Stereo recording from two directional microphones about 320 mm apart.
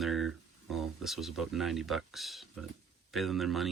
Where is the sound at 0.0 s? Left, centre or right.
Centre.